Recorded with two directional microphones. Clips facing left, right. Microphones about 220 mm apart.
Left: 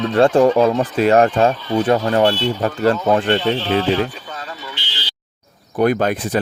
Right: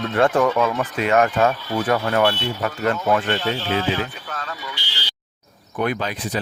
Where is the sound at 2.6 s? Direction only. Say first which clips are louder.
Left 5 dB; 30° left (ahead or behind).